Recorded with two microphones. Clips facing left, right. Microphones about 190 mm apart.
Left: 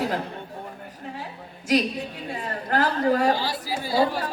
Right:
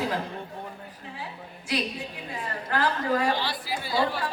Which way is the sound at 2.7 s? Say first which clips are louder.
Left 4 dB; 45° left (ahead or behind).